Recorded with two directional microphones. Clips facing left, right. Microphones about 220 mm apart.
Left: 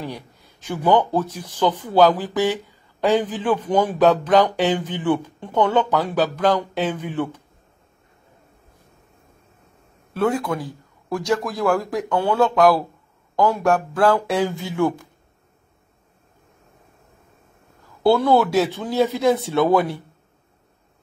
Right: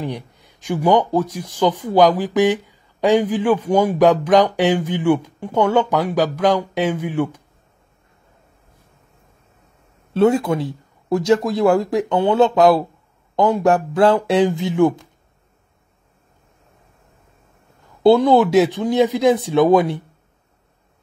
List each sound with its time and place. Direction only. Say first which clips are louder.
0.0 s speech: right 5 dB; 15° right (ahead or behind)
10.1 s speech: right 6 dB; 25° right (ahead or behind)
18.0 s speech: right 4 dB; 15° right (ahead or behind)